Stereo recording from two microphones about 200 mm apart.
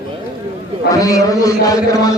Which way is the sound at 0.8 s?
15° left (ahead or behind).